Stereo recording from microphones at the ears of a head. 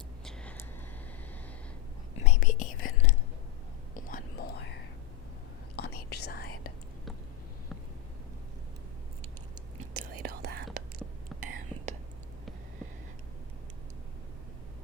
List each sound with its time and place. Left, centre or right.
2.1 s whispering: left
5.7 s whispering: left
9.7 s whispering: right